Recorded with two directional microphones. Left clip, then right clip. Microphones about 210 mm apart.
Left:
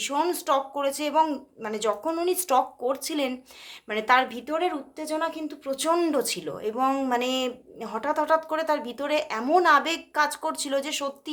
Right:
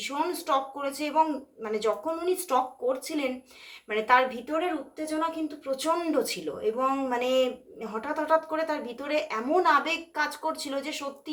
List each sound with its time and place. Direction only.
0.0 s speech: 45° left (ahead or behind)